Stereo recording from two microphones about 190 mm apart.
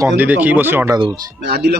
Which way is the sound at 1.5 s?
55° right (ahead or behind).